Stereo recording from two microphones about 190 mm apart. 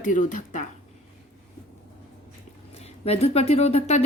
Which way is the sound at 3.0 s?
35° left (ahead or behind).